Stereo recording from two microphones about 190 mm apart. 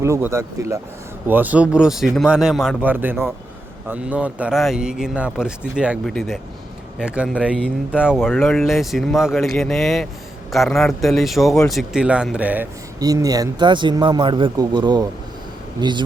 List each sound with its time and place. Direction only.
0.0 s a man's voice: 15° right (ahead or behind)
13.0 s speech: 20° right (ahead or behind)